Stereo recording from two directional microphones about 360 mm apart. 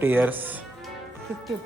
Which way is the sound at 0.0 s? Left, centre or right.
Centre.